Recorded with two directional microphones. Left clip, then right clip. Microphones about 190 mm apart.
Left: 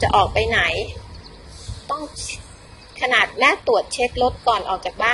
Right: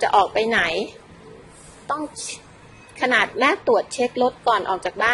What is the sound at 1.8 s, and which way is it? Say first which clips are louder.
A woman's voice: even; 25° right (ahead or behind).